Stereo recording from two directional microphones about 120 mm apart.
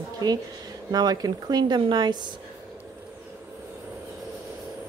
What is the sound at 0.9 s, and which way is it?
Speech, 35° right (ahead or behind).